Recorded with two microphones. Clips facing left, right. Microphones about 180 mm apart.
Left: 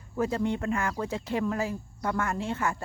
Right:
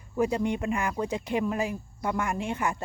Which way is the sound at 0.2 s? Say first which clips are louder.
Right 2 dB; 15° right (ahead or behind).